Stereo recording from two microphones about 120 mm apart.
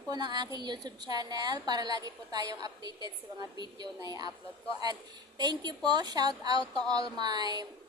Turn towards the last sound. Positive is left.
turn(degrees=-35)  # may be behind; listen again after turning